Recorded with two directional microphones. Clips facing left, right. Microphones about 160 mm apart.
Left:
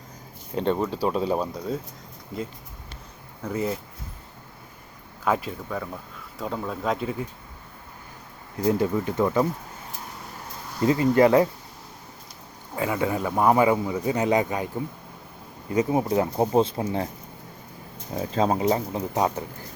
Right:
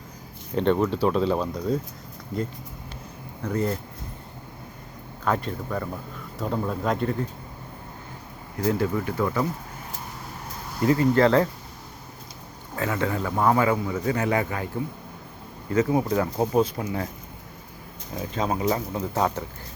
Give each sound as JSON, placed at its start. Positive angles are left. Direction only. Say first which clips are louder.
{"t": 0.5, "sound": "speech", "louder": "right 3 dB", "side_deg": 10}
{"t": 3.4, "sound": "speech", "louder": "right 1 dB", "side_deg": 5}
{"t": 5.2, "sound": "speech", "louder": "left 1 dB", "side_deg": 5}
{"t": 8.5, "sound": "speech", "louder": "left 1 dB", "side_deg": 20}
{"t": 10.8, "sound": "speech", "louder": "left 1 dB", "side_deg": 20}
{"t": 12.7, "sound": "speech", "louder": "left 1 dB", "side_deg": 15}
{"t": 15.7, "sound": "speech", "louder": "even", "side_deg": 20}
{"t": 18.1, "sound": "speech", "louder": "left 4 dB", "side_deg": 30}